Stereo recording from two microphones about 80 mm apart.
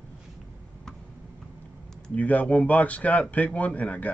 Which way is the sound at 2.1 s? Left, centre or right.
Centre.